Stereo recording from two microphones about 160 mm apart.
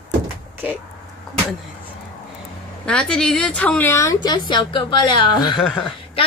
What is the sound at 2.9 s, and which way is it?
A woman's voice, 5° left (ahead or behind).